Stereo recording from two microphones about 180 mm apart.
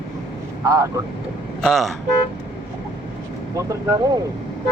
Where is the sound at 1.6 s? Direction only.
Centre (ahead or behind).